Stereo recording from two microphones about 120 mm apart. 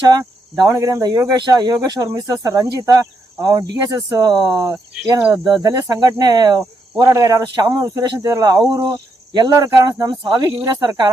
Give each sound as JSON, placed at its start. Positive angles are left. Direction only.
{"t": 0.1, "sound": "speech", "side_deg": -35}